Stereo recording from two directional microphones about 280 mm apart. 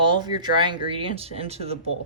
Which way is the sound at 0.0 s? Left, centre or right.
Centre.